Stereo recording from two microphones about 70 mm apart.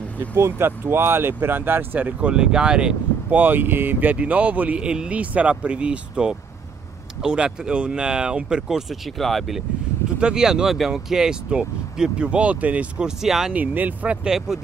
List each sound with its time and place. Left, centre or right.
0.3 s speech: right; by 3.3 s centre
3.3 s speech: right; by 9.6 s centre
10.1 s speech: centre
13.5 s speech: right
14.2 s speech: centre